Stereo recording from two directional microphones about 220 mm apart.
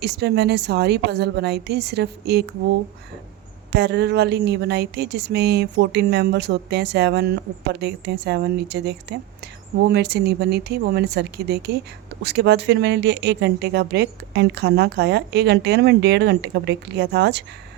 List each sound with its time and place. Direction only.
0.0 s speech: 50° right (ahead or behind)
3.7 s speech: 50° right (ahead or behind)